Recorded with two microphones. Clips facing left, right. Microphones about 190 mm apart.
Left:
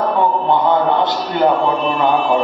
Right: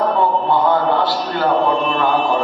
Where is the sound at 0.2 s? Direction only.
20° left (ahead or behind).